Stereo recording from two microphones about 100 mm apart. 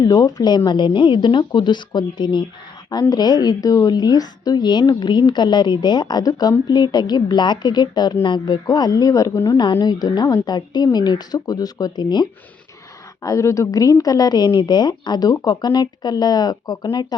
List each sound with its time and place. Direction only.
0.0 s a woman's voice: 40° left (ahead or behind)
9.8 s a woman's voice: 45° left (ahead or behind)
13.2 s a woman's voice: 30° left (ahead or behind)